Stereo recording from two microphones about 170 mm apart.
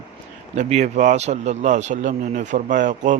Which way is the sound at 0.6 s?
40° right (ahead or behind).